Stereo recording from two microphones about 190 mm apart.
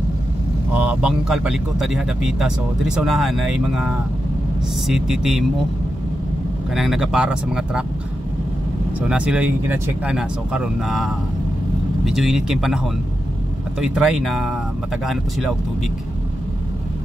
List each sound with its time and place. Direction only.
0.7 s speech: 5° right (ahead or behind)
6.7 s speech: centre (ahead or behind)
9.1 s speech: 5° right (ahead or behind)